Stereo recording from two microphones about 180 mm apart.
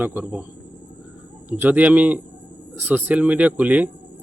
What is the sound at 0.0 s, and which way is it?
Speech, 10° right (ahead or behind).